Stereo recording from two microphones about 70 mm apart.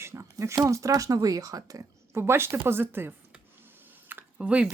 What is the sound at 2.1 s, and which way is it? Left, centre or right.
Speech, right.